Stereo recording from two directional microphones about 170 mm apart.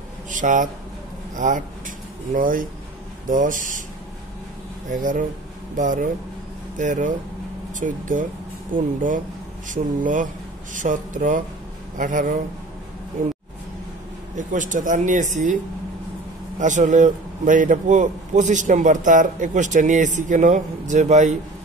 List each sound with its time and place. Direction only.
0.3 s a man's voice: 50° right (ahead or behind)
4.8 s a man's voice: 50° right (ahead or behind)
16.5 s a man's voice: 45° right (ahead or behind)